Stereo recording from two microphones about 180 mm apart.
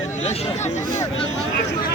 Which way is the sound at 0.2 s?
40° left (ahead or behind).